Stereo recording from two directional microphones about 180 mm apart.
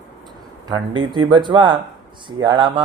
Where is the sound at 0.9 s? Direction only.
25° right (ahead or behind).